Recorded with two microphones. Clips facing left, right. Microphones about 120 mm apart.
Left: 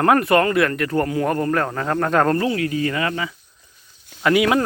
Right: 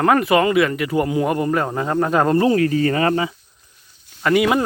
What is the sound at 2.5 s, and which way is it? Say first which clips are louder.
Speech: right 5 dB; 40° right (ahead or behind).